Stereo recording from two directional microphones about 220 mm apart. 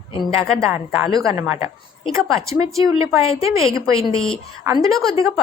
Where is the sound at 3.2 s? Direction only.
25° left (ahead or behind).